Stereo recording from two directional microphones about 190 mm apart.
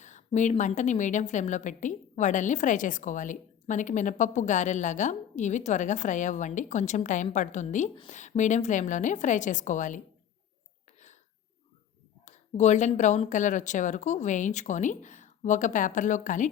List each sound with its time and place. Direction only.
0.0 s a woman's voice: 40° left (ahead or behind)
12.2 s a woman's voice: 40° left (ahead or behind)